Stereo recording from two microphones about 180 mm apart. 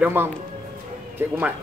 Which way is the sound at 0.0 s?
10° right (ahead or behind).